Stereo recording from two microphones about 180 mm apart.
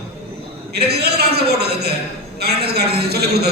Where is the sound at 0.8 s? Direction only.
65° right (ahead or behind).